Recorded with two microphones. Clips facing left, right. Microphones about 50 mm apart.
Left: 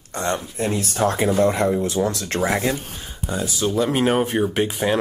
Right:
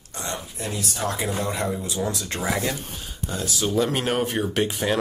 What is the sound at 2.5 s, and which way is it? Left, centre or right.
Speech, left.